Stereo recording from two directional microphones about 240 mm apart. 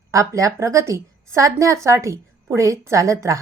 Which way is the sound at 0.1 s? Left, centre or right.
Centre.